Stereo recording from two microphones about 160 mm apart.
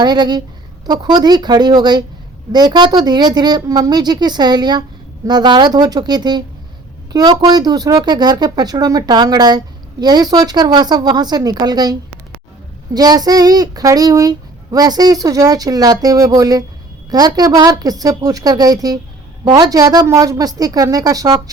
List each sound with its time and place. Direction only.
0.0 s a child's voice: 25° right (ahead or behind)